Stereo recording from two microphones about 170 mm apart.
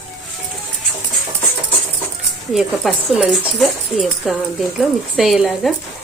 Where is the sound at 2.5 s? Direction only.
Centre (ahead or behind).